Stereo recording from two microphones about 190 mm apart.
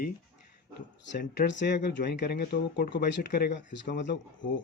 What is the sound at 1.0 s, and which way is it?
Speech, 60° left (ahead or behind).